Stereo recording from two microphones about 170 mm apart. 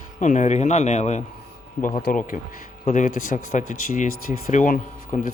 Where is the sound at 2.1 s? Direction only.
55° left (ahead or behind).